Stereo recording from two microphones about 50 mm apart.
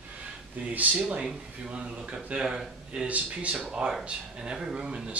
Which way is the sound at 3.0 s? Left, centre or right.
Right.